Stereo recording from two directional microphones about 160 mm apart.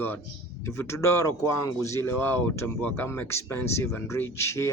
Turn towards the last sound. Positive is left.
turn(degrees=15)  # may be behind; listen again after turning